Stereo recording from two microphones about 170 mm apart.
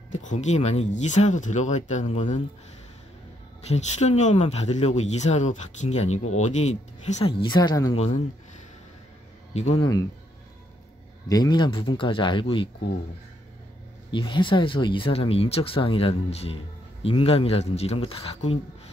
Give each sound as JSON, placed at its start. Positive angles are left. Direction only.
{"t": 0.1, "sound": "speech", "side_deg": 45}
{"t": 3.6, "sound": "speech", "side_deg": 40}
{"t": 9.5, "sound": "speech", "side_deg": 40}
{"t": 11.2, "sound": "speech", "side_deg": 20}
{"t": 14.1, "sound": "speech", "side_deg": 30}